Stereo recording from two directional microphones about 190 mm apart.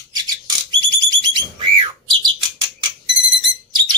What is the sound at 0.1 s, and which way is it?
Bird, 20° right (ahead or behind).